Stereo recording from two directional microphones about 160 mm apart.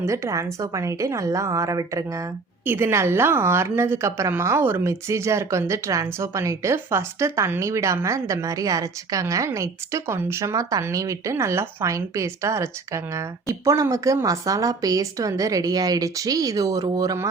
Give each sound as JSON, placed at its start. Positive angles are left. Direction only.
{"t": 0.0, "sound": "a woman's voice", "side_deg": -20}